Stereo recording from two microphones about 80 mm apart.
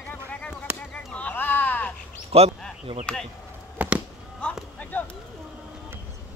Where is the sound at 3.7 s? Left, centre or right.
Centre.